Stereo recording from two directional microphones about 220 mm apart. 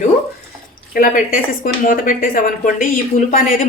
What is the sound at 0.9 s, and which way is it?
A woman's voice, 40° left (ahead or behind).